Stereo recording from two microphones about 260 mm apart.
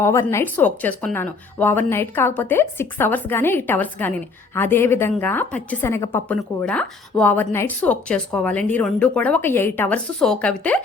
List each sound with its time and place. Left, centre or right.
0.0 s a woman's voice: centre